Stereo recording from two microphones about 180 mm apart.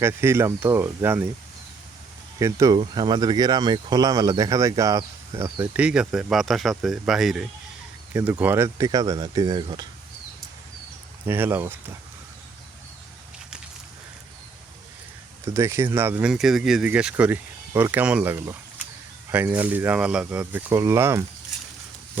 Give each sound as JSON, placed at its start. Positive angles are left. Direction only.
{"t": 0.0, "sound": "speech", "side_deg": -15}
{"t": 2.4, "sound": "speech", "side_deg": -20}
{"t": 11.3, "sound": "speech", "side_deg": -10}
{"t": 15.5, "sound": "speech", "side_deg": -15}